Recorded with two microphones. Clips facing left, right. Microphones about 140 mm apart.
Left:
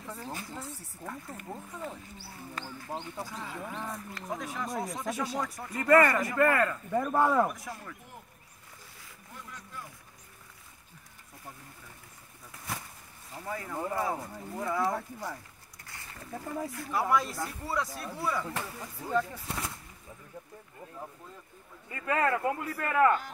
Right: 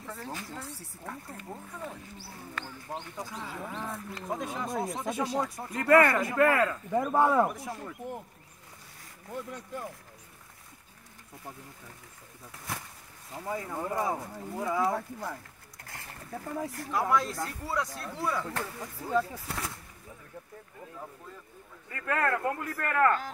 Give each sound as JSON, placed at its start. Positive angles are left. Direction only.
{"t": 0.2, "sound": "speech", "side_deg": 5}
{"t": 4.1, "sound": "speech", "side_deg": -25}
{"t": 5.7, "sound": "speech", "side_deg": 0}
{"t": 7.0, "sound": "speech", "side_deg": -15}
{"t": 7.4, "sound": "speech", "side_deg": -25}
{"t": 9.3, "sound": "speech", "side_deg": -60}
{"t": 13.4, "sound": "speech", "side_deg": -15}
{"t": 14.1, "sound": "speech", "side_deg": -5}
{"t": 16.3, "sound": "speech", "side_deg": 0}
{"t": 18.8, "sound": "speech", "side_deg": -5}
{"t": 21.8, "sound": "speech", "side_deg": 15}